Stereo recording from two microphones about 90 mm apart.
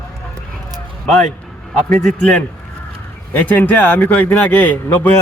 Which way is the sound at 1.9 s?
10° left (ahead or behind).